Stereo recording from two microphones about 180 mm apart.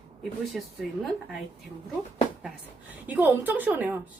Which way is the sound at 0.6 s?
Centre (ahead or behind).